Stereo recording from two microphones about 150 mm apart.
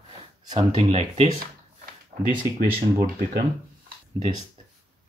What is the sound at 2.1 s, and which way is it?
Speech, 65° right (ahead or behind).